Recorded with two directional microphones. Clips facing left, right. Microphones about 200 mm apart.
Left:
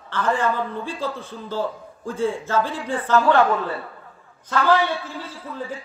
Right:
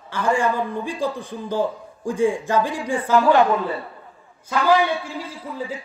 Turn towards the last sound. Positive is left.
turn(degrees=-10)  # may be behind; listen again after turning